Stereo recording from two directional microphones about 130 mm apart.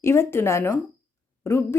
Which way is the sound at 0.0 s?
20° left (ahead or behind).